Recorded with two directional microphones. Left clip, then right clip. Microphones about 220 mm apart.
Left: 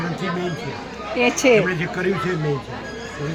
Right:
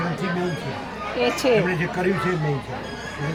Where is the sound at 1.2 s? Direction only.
25° left (ahead or behind).